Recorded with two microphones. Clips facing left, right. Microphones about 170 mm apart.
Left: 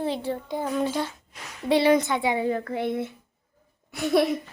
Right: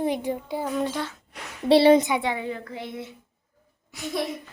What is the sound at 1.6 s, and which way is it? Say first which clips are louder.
Speech: right 4 dB; 30° right (ahead or behind).